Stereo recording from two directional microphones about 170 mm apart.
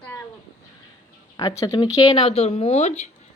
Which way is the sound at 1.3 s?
20° left (ahead or behind).